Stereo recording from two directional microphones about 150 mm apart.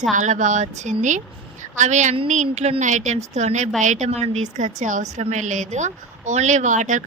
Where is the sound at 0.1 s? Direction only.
55° right (ahead or behind).